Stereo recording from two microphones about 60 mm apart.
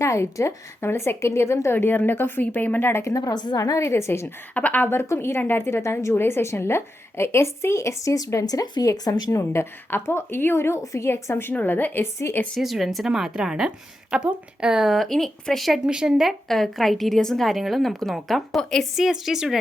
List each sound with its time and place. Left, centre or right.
0.0 s a woman's voice: left
1.7 s a woman's voice: left
3.0 s a woman's voice: left
3.8 s a woman's voice: left
4.5 s speech: left
4.9 s a woman's voice: left
12.5 s a woman's voice: centre
13.1 s a woman's voice: centre
15.9 s a woman's voice: centre
16.5 s a woman's voice: centre